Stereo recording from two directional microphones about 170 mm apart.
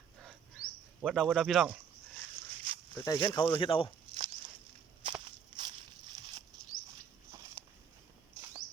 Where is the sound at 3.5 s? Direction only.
30° left (ahead or behind).